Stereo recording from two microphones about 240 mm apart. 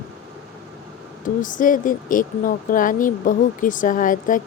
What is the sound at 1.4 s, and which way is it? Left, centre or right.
Speech, left.